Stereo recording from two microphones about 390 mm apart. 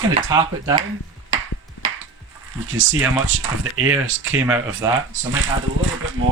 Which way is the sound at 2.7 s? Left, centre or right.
Right.